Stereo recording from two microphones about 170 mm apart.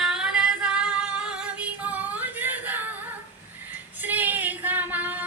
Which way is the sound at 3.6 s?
10° right (ahead or behind).